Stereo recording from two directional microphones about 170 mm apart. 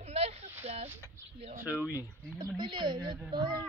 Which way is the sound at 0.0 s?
35° right (ahead or behind).